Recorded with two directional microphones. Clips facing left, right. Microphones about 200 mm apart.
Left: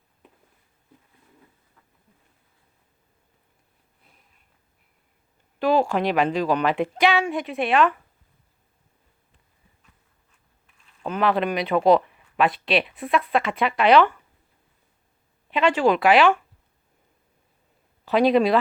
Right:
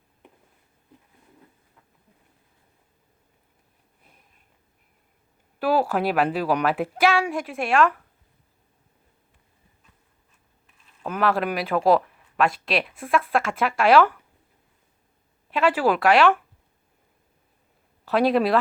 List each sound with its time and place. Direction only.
5.5 s speech: 5° right (ahead or behind)
11.0 s speech: 5° right (ahead or behind)
15.4 s speech: 5° right (ahead or behind)
18.0 s speech: centre (ahead or behind)